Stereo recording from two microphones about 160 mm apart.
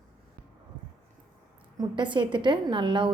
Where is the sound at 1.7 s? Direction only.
30° right (ahead or behind).